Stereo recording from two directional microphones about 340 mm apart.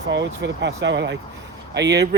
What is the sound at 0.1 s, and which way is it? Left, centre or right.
Speech, right.